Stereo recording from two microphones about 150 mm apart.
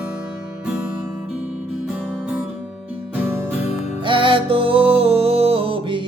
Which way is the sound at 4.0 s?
35° right (ahead or behind).